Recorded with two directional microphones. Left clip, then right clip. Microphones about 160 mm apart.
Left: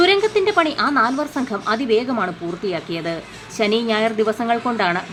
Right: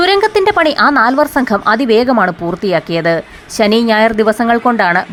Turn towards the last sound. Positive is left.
turn(degrees=-45)  # may be behind; listen again after turning